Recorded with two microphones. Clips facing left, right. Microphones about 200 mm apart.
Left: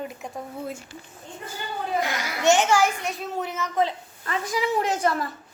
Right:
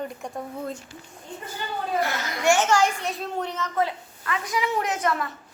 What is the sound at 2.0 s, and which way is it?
Speech, 15° left (ahead or behind).